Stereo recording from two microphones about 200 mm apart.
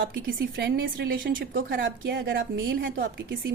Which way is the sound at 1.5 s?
50° right (ahead or behind).